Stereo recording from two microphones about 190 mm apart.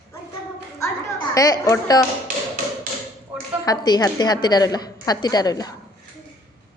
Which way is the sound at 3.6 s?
20° left (ahead or behind).